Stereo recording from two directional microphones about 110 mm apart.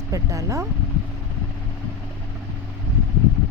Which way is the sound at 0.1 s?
30° right (ahead or behind).